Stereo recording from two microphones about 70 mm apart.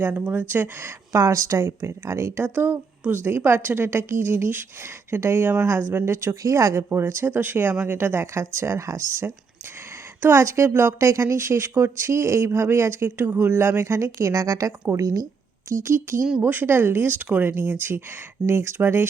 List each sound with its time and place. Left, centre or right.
0.0 s speech: right
15.8 s speech: right